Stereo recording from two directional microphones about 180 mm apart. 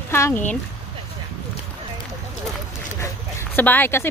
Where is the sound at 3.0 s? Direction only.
15° left (ahead or behind).